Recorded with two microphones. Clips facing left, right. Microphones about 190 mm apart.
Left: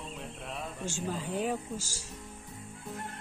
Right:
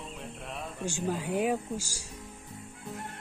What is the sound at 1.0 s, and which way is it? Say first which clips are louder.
Speech: right 4 dB; 10° right (ahead or behind).